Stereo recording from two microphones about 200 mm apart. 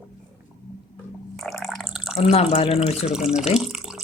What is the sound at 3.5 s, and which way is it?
Water, centre (ahead or behind).